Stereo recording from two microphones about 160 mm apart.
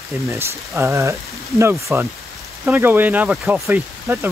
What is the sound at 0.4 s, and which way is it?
Speech, 15° right (ahead or behind).